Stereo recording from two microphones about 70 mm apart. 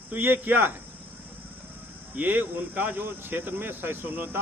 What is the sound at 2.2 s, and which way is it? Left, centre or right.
Speech, right.